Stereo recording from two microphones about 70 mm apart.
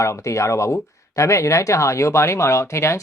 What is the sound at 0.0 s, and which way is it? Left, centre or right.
Speech, left.